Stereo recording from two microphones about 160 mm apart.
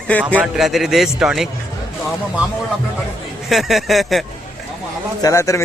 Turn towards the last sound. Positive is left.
turn(degrees=20)  # may be behind; listen again after turning